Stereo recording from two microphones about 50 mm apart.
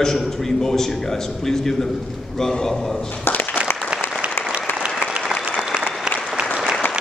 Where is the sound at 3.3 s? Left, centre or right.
Left.